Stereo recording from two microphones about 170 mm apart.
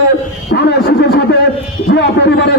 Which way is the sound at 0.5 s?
90° left.